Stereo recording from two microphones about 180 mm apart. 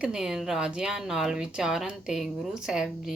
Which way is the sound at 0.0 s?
5° right (ahead or behind).